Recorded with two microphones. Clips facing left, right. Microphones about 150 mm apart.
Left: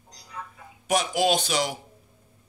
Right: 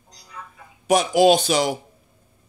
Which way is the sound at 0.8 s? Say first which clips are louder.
Right 7 dB; 30° right (ahead or behind).